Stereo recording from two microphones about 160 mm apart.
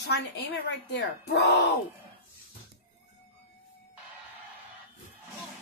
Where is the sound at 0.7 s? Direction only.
90° left.